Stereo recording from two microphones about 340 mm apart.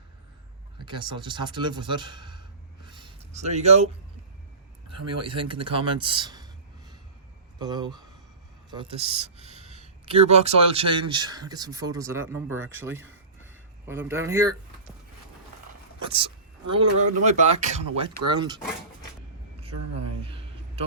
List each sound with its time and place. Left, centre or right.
0.8 s speech: centre
2.8 s a sound: centre
4.9 s speech: right
5.2 s speech: centre
16.0 s speech: centre
20.2 s a sound: centre